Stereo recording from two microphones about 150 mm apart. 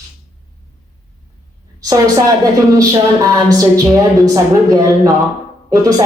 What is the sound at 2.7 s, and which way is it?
A woman's voice, 20° right (ahead or behind).